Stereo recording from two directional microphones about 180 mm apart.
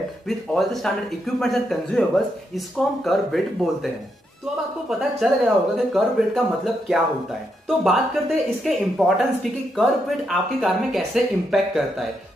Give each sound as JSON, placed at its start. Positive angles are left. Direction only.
{"t": 0.3, "sound": "speech", "side_deg": 0}
{"t": 4.8, "sound": "speech", "side_deg": 0}